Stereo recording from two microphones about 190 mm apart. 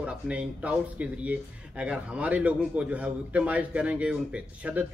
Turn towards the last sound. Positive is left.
turn(degrees=-5)  # may be behind; listen again after turning